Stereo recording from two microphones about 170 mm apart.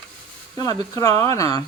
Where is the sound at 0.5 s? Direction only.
20° left (ahead or behind).